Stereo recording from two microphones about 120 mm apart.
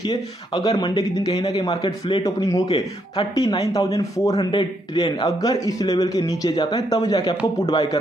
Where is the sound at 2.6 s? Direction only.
55° left (ahead or behind).